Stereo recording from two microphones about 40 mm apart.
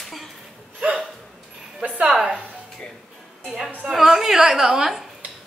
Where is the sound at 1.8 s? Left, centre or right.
Right.